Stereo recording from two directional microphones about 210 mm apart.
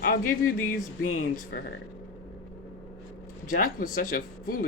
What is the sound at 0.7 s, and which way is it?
Speech, 40° left (ahead or behind).